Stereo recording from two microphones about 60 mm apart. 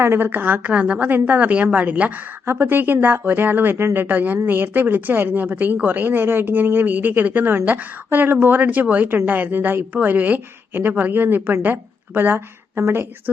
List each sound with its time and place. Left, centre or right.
0.0 s a woman's voice: right
0.3 s a woman's voice: right
2.5 s a woman's voice: right